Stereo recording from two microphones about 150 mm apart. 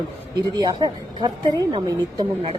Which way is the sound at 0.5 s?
25° right (ahead or behind).